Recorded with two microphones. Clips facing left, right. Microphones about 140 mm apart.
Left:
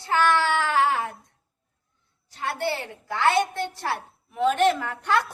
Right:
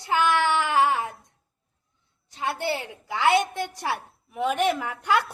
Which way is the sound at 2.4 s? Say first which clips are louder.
Even; 15° right (ahead or behind).